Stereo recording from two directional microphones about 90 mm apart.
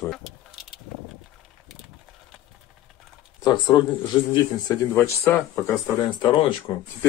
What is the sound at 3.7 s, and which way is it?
Speech, 45° left (ahead or behind).